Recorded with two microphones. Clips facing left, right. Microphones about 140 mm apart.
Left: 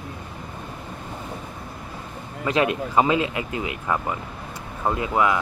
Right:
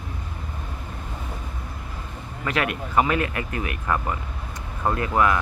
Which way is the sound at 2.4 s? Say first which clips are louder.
Left 4 dB; 20° left (ahead or behind).